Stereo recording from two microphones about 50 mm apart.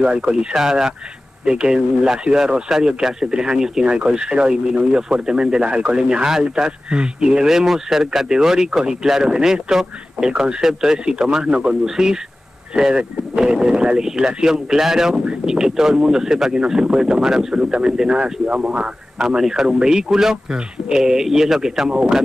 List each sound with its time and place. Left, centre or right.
0.0 s speech: centre
19.1 s speech: centre